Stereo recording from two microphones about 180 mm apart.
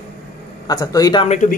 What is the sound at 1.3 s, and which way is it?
Speech, 45° left (ahead or behind).